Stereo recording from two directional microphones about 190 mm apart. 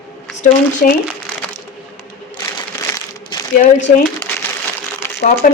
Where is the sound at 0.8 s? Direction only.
45° left (ahead or behind).